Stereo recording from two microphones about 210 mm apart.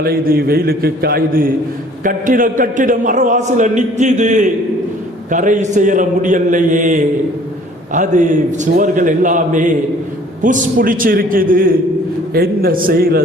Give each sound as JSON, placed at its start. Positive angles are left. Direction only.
{"t": 0.0, "sound": "a man's voice", "side_deg": -45}